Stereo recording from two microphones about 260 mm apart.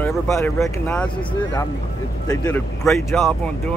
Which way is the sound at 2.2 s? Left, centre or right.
Centre.